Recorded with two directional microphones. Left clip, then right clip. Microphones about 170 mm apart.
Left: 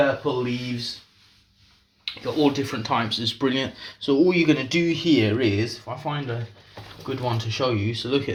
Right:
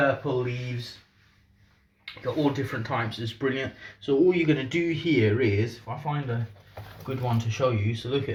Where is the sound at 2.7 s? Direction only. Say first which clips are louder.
Left 5 dB; 35° left (ahead or behind).